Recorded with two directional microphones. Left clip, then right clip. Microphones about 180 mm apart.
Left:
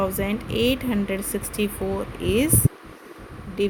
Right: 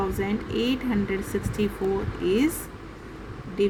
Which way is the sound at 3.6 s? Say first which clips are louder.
Even; 50° left (ahead or behind).